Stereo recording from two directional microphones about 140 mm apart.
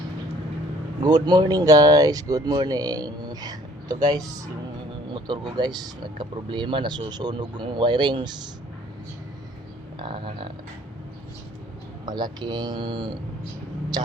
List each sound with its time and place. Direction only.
1.0 s speech: 30° right (ahead or behind)
10.0 s speech: 35° right (ahead or behind)
12.0 s speech: 30° right (ahead or behind)